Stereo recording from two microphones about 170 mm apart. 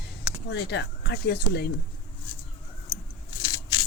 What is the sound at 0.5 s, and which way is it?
Speech, 85° left.